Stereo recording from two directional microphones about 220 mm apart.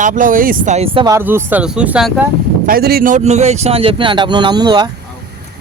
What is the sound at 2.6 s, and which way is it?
Speech, 45° right (ahead or behind).